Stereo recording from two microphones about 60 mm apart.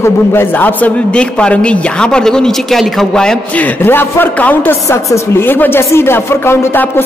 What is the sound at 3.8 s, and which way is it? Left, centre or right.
Chopping, left.